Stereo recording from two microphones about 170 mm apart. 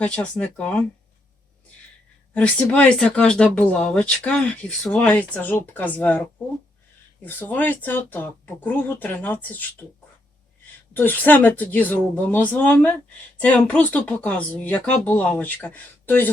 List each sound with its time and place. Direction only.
0.0 s speech: 5° left (ahead or behind)
2.3 s speech: 5° left (ahead or behind)
7.3 s speech: 10° left (ahead or behind)
10.9 s speech: 10° left (ahead or behind)